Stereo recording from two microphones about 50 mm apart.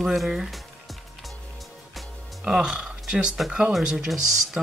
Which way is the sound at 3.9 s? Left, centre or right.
Centre.